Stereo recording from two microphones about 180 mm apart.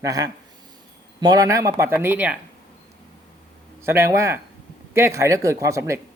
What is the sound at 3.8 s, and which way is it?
Speech, 15° right (ahead or behind).